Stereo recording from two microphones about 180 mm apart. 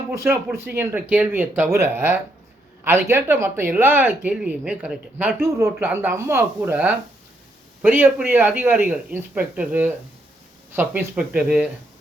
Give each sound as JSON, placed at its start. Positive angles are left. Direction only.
{"t": 0.1, "sound": "speech", "side_deg": -15}